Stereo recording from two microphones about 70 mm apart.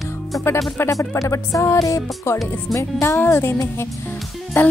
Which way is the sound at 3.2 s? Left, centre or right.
Left.